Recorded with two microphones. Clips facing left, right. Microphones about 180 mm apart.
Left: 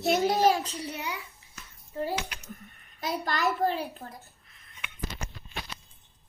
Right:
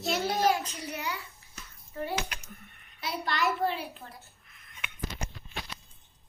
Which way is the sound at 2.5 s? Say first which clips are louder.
Left 5 dB; 40° left (ahead or behind).